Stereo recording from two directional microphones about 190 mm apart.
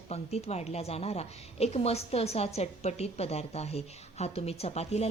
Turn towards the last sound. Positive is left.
turn(degrees=35)  # may be behind; listen again after turning